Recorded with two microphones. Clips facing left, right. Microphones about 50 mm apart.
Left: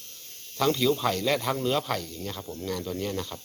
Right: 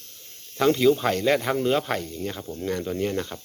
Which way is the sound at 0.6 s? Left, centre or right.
Right.